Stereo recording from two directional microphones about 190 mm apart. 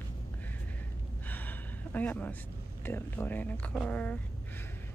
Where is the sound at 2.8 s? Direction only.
10° left (ahead or behind).